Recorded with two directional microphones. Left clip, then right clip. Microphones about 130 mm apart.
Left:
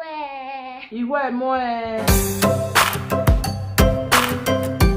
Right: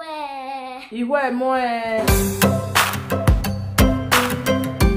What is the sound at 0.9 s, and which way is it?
Speech, 30° right (ahead or behind).